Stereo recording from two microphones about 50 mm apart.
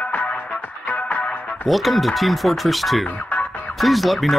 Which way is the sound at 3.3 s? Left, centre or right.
Left.